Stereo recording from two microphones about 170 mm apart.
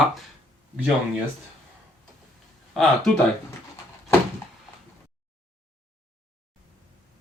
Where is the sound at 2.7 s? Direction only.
5° left (ahead or behind).